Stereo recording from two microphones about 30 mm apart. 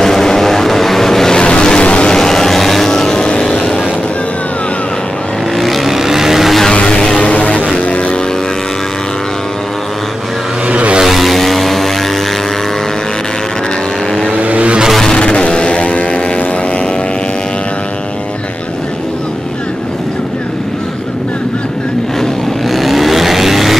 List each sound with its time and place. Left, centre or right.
0.0 s vehicle: centre
1.4 s vehicle: left
2.0 s vehicle: centre
2.9 s vehicle: left
5.9 s vehicle: centre
6.7 s vehicle: left
7.2 s music: left
7.8 s vehicle: left
10.7 s vehicle: right
11.1 s vehicle: centre
14.3 s vehicle: right
15.1 s vehicle: left
16.0 s vehicle: left
22.7 s vehicle: centre